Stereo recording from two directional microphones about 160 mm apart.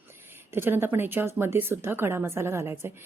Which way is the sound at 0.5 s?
15° right (ahead or behind).